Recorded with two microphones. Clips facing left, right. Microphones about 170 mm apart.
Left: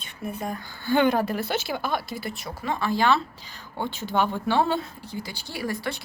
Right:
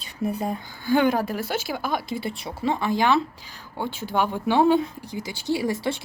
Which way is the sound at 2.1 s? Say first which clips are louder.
Right 4 dB; 30° right (ahead or behind).